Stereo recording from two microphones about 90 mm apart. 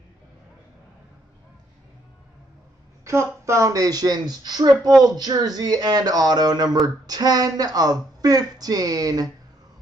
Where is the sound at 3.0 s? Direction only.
35° right (ahead or behind).